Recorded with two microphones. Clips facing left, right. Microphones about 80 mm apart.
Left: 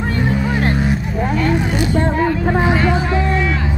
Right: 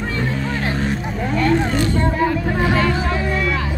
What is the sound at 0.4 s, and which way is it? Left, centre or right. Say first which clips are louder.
Vehicle: left 4 dB; centre.